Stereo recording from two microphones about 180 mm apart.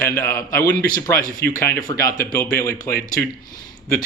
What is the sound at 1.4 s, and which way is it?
Speech, 65° left (ahead or behind).